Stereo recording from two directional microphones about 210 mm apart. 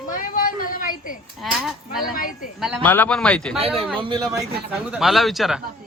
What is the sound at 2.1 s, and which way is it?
Speech, 40° left (ahead or behind).